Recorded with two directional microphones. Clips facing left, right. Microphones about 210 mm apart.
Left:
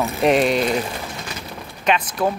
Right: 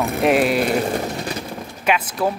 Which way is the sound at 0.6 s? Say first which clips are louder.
Right 3 dB; 40° right (ahead or behind).